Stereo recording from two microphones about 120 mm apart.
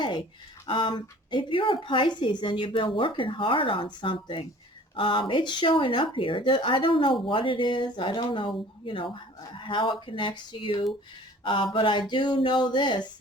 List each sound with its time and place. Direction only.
0.7 s a woman's voice: 45° left (ahead or behind)